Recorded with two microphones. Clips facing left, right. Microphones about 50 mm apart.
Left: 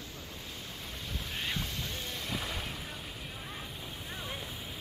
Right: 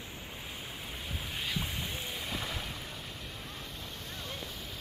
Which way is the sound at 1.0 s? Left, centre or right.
Centre.